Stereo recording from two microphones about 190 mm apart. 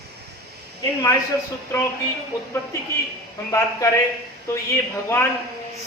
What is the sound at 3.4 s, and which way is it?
Speech, 15° left (ahead or behind).